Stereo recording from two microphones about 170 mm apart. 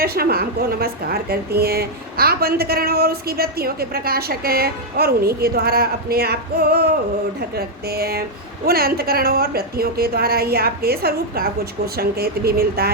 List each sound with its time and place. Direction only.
0.0 s a woman's voice: 65° right (ahead or behind)